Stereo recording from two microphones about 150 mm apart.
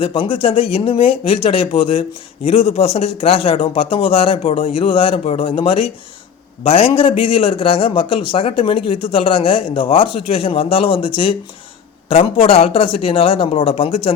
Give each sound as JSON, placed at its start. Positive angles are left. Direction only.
{"t": 0.0, "sound": "a man's voice", "side_deg": 35}